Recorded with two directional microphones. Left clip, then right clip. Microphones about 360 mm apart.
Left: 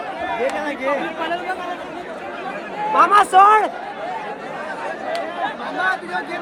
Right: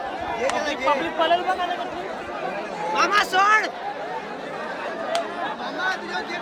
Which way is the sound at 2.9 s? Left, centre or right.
Centre.